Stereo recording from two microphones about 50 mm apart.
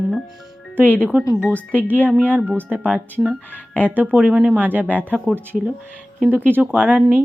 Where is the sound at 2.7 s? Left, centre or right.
Right.